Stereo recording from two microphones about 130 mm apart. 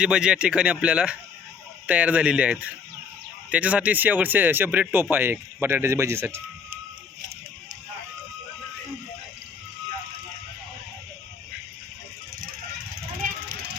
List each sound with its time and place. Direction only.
0.0 s speech: 5° right (ahead or behind)